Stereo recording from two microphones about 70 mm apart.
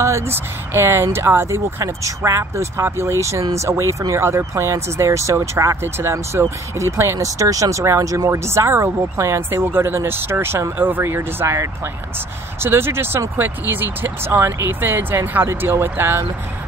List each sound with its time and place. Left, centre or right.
0.0 s speech: right
6.3 s speech: right
7.2 s speech: right